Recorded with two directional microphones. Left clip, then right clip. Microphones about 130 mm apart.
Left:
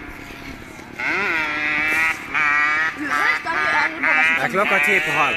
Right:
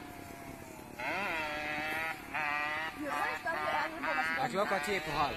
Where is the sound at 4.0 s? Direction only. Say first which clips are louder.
Left 16 dB; 30° right (ahead or behind).